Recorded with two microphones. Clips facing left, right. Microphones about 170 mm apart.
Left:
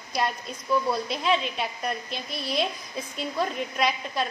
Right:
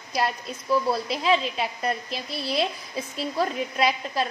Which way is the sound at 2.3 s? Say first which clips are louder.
Right 2 dB; 30° right (ahead or behind).